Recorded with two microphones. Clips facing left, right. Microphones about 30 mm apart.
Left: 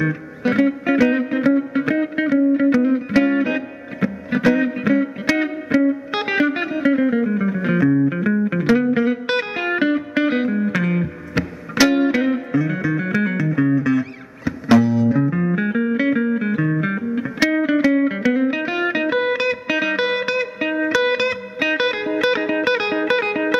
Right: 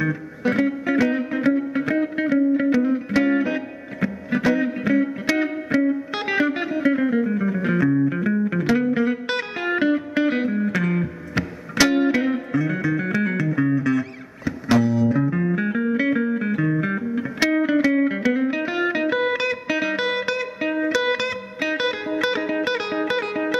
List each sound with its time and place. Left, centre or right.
0.0 s music: centre
2.7 s music: centre